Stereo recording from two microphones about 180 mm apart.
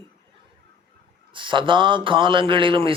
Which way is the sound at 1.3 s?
25° right (ahead or behind).